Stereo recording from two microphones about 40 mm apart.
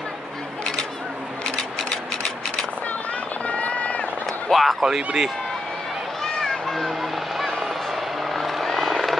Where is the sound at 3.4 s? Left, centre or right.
Left.